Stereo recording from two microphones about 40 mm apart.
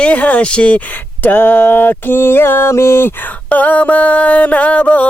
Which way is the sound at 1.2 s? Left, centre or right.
Left.